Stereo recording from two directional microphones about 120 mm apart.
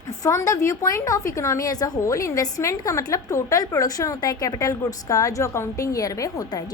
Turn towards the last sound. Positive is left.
turn(degrees=35)  # may be behind; listen again after turning